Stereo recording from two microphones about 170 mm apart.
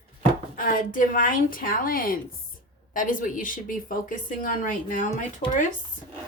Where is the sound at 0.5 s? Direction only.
55° left (ahead or behind).